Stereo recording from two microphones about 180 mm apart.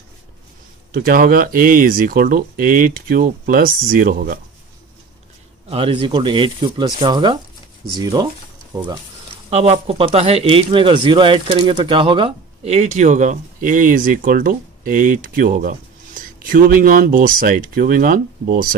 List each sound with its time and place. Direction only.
0.9 s speech: 50° right (ahead or behind)
5.7 s speech: 30° right (ahead or behind)
9.5 s speech: 35° right (ahead or behind); by 18.8 s 50° right (ahead or behind)